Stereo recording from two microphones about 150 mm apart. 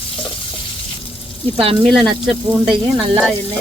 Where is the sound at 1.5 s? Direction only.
40° right (ahead or behind).